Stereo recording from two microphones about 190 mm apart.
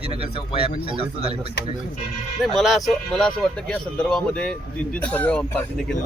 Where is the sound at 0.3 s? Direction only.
30° left (ahead or behind).